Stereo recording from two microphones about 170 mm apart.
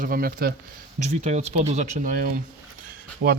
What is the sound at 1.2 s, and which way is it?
Speech, 40° right (ahead or behind).